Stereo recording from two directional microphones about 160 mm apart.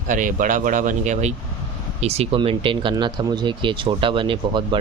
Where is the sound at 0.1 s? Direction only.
55° right (ahead or behind).